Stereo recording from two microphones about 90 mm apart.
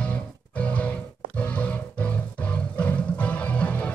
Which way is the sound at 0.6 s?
15° left (ahead or behind).